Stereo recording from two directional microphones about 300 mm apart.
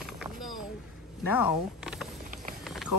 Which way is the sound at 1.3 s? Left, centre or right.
Centre.